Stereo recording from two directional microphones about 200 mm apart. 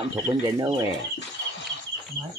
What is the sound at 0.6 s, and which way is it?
Speech, 15° right (ahead or behind).